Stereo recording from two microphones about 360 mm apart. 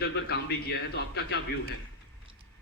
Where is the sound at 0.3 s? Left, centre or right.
Left.